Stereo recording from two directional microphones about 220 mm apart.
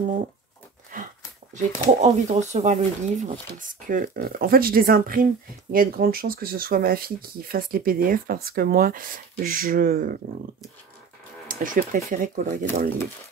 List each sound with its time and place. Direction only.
0.9 s a sound: 35° right (ahead or behind)
1.5 s speech: 30° right (ahead or behind)
11.4 s speech: 40° right (ahead or behind)